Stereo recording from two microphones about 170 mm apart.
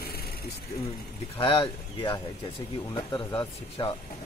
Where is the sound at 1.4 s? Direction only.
35° left (ahead or behind).